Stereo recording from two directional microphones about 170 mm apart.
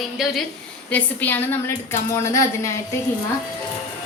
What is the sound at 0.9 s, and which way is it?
A woman's voice, 10° left (ahead or behind).